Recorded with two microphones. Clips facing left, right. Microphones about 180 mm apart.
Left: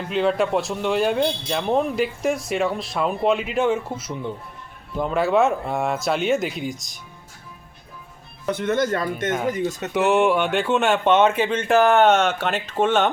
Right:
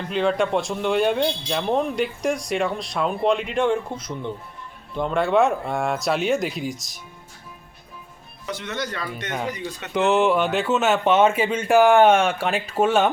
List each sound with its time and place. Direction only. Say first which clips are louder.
0.1 s speech: left 1 dB; centre (ahead or behind)
8.4 s speech: left 8 dB; 55° left (ahead or behind)
9.9 s speech: even; 5° left (ahead or behind)